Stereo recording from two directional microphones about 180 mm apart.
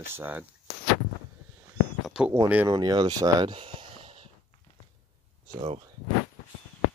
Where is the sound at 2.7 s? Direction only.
20° right (ahead or behind).